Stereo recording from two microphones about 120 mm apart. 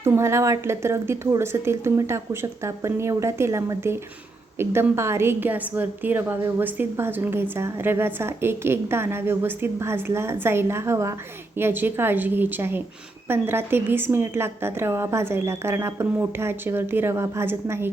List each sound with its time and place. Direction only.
0.0 s a woman's voice: 20° right (ahead or behind)